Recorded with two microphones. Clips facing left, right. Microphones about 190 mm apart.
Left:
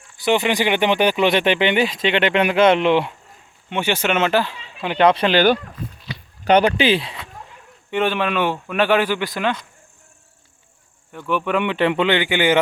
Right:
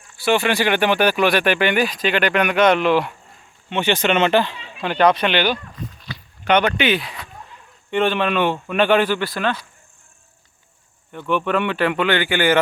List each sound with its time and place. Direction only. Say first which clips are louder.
0.2 s speech: even; 20° left (ahead or behind)
3.7 s speech: right 2 dB; 10° left (ahead or behind)
4.9 s speech: left 2 dB; 30° left (ahead or behind)
7.9 s speech: right 1 dB; 10° left (ahead or behind)
11.1 s speech: right 1 dB; 5° left (ahead or behind)